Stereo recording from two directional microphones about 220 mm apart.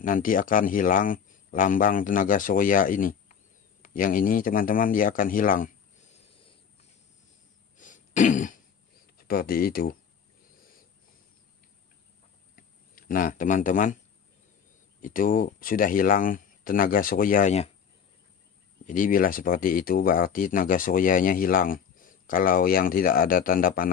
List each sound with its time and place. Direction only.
0.0 s speech: 40° left (ahead or behind)
7.7 s throat clearing: 35° left (ahead or behind)
9.3 s speech: 40° left (ahead or behind)
12.5 s a sound: 40° left (ahead or behind)
15.0 s speech: 40° left (ahead or behind)
18.9 s speech: 40° left (ahead or behind)